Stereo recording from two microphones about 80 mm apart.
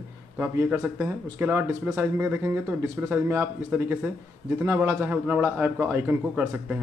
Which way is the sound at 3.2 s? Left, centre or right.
Right.